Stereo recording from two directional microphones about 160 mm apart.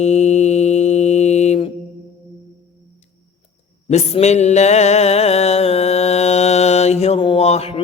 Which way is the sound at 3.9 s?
40° left (ahead or behind).